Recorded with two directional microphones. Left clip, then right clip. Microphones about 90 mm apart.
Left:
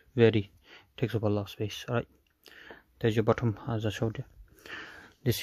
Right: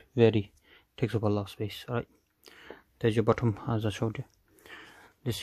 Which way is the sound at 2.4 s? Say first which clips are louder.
Even; centre (ahead or behind).